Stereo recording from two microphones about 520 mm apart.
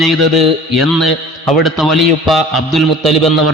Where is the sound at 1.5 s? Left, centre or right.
Right.